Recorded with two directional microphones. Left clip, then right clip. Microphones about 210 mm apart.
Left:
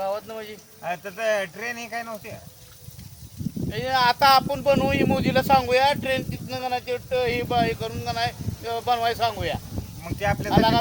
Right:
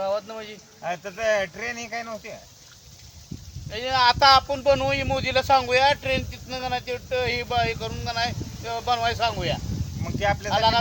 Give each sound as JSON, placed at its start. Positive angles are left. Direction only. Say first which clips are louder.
{"t": 0.0, "sound": "a sound", "louder": "right 1 dB", "side_deg": 15}
{"t": 0.8, "sound": "speech", "louder": "even", "side_deg": -5}
{"t": 3.7, "sound": "speech", "louder": "right 1 dB", "side_deg": 15}
{"t": 10.0, "sound": "speech", "louder": "right 1 dB", "side_deg": -5}
{"t": 10.5, "sound": "speech", "louder": "left 1 dB", "side_deg": 15}